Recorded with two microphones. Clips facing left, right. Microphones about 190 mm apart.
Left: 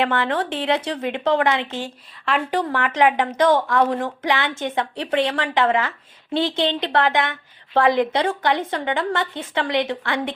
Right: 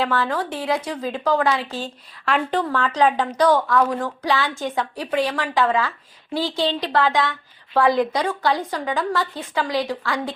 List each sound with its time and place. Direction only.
0.0 s a woman's voice: 20° left (ahead or behind)
2.7 s a woman's voice: 20° left (ahead or behind)